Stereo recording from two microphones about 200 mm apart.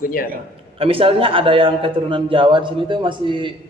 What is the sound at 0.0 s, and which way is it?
Speech, 45° left (ahead or behind).